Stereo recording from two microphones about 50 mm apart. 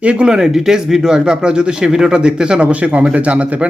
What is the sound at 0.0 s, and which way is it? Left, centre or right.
Speech, centre.